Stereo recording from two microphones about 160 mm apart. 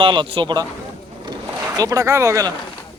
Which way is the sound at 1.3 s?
20° right (ahead or behind).